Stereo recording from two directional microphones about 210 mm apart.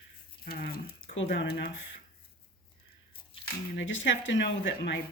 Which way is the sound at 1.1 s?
60° left (ahead or behind).